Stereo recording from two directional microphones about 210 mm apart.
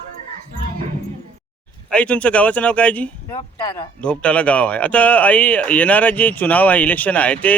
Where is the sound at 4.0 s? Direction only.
5° left (ahead or behind).